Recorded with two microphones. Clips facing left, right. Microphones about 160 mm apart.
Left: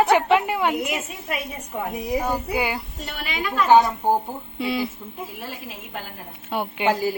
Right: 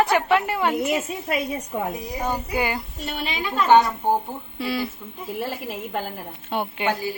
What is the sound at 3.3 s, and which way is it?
Speech, 25° right (ahead or behind).